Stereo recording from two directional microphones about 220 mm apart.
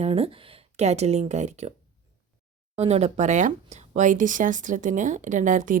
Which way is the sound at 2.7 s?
30° right (ahead or behind).